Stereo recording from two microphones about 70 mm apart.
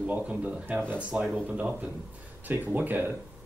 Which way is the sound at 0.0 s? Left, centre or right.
Centre.